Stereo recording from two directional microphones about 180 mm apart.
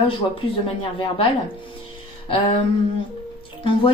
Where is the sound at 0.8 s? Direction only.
30° left (ahead or behind).